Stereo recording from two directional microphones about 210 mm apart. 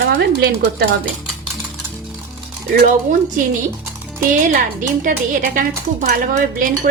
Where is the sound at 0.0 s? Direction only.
45° right (ahead or behind).